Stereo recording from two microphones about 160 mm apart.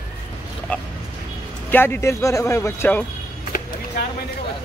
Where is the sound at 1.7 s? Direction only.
15° left (ahead or behind).